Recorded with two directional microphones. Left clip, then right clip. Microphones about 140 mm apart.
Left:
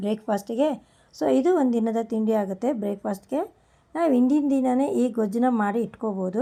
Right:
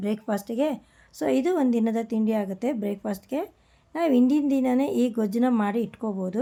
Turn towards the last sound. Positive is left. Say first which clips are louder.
# left 3 dB
turn(degrees=-10)  # may be behind; listen again after turning